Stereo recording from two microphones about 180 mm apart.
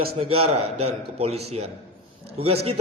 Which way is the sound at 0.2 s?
35° right (ahead or behind).